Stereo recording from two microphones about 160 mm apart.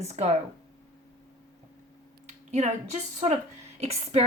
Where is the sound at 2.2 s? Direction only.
45° right (ahead or behind).